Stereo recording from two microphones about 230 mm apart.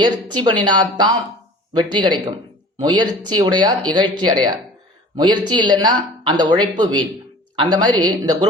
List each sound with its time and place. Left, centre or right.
0.0 s speech: centre